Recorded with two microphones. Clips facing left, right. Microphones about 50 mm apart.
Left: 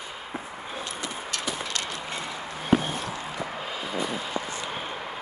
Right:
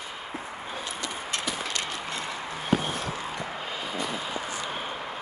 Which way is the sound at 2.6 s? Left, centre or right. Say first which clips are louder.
Left 3 dB; centre.